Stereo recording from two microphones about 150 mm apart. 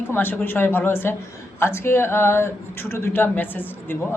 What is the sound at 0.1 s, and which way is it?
Speech, 15° left (ahead or behind).